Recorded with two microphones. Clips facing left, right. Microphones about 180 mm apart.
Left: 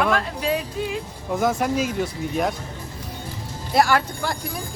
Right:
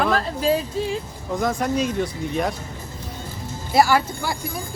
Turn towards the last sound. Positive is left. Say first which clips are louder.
# right 1 dB
turn(degrees=-5)  # may be behind; listen again after turning